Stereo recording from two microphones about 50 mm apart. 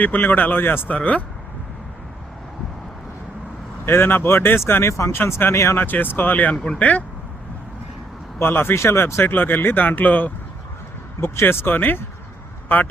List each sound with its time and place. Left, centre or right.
0.0 s speech: left
0.9 s speech: left
3.8 s speech: left
4.6 s speech: left
5.1 s speech: left
5.7 s speech: left
8.4 s speech: left
8.7 s speech: left
9.3 s speech: left
11.2 s a man's voice: left